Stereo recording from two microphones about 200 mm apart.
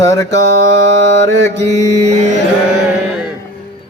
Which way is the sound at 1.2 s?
60° right (ahead or behind).